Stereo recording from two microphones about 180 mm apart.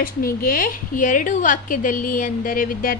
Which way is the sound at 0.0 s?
55° left (ahead or behind).